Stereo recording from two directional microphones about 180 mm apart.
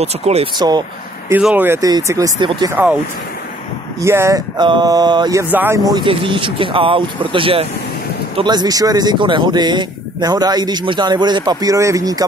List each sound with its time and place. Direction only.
0.0 s speech: 35° right (ahead or behind)
0.6 s speech: 25° right (ahead or behind)
1.3 s speech: 10° right (ahead or behind)
2.7 s speech: 10° right (ahead or behind)
4.0 s speech: 15° right (ahead or behind)
5.9 s speech: 25° right (ahead or behind)